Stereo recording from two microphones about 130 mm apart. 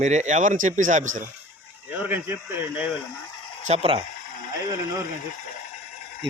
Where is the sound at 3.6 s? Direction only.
50° right (ahead or behind).